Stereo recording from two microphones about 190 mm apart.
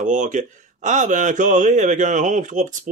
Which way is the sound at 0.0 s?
40° right (ahead or behind).